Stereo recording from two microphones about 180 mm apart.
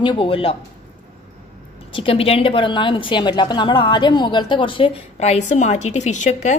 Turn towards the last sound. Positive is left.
turn(degrees=40)  # may be behind; listen again after turning